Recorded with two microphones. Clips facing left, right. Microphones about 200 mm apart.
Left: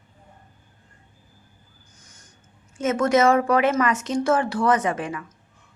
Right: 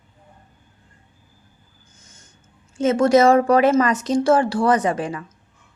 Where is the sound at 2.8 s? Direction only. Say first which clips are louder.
Right 4 dB; 30° right (ahead or behind).